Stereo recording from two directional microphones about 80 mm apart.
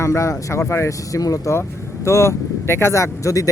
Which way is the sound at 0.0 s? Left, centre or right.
Left.